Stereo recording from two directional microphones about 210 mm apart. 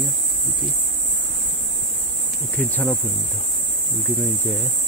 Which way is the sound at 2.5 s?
5° left (ahead or behind).